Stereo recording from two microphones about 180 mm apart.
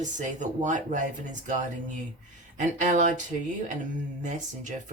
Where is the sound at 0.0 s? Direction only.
45° right (ahead or behind).